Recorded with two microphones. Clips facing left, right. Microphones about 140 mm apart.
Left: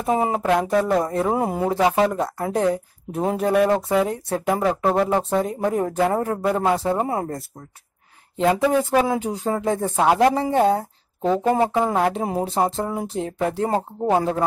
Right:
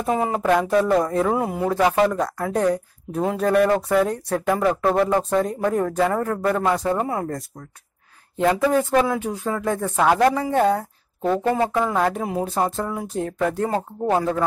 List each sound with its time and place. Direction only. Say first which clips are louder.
0.1 s speech: left 2 dB; 20° left (ahead or behind)
0.4 s speech: right 1 dB; 5° left (ahead or behind)
1.2 s speech: even; 25° left (ahead or behind)
1.7 s speech: right 1 dB; 15° left (ahead or behind)
3.9 s speech: right 1 dB; 5° left (ahead or behind)
5.6 s speech: even; 20° left (ahead or behind)
8.4 s speech: even; 15° left (ahead or behind)
11.2 s speech: left 1 dB; 15° left (ahead or behind)